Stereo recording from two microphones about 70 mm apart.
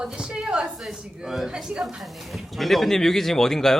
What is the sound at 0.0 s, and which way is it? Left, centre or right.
A woman's voice, centre.